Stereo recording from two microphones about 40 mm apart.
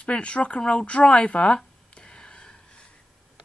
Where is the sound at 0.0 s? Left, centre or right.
Left.